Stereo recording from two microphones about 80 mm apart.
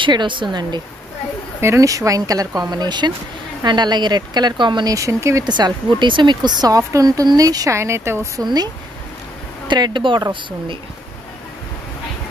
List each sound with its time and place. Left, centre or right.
0.0 s speech: right
1.6 s speech: right
4.8 s speech: right
5.4 s speech: right
6.9 s speech: right
9.7 s speech: right